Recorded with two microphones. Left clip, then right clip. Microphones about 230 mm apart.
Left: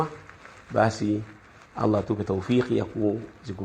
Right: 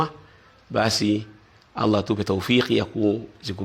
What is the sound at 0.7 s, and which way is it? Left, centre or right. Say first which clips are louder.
Speech: right 2 dB; right.